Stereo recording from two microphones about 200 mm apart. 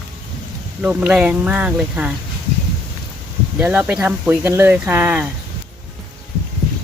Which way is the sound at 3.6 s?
10° right (ahead or behind).